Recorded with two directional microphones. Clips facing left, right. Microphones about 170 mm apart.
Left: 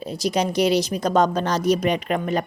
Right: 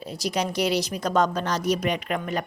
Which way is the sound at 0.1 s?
20° left (ahead or behind).